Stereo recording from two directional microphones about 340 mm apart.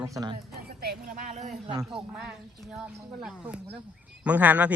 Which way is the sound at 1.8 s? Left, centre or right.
Centre.